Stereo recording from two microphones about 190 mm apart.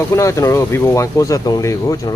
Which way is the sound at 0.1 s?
15° left (ahead or behind).